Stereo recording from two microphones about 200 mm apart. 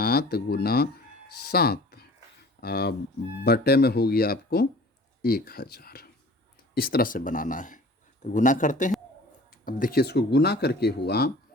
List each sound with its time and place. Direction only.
0.0 s speech: 50° left (ahead or behind)